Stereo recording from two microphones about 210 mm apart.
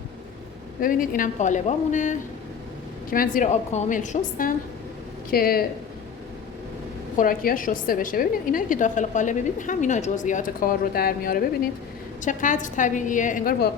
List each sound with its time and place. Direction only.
0.8 s a woman's voice: 40° left (ahead or behind)
7.2 s a woman's voice: 40° left (ahead or behind)